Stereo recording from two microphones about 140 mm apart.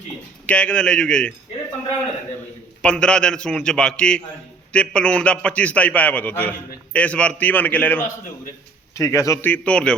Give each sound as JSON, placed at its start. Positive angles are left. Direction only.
{"t": 0.4, "sound": "a man's voice", "side_deg": 10}
{"t": 2.8, "sound": "a man's voice", "side_deg": 5}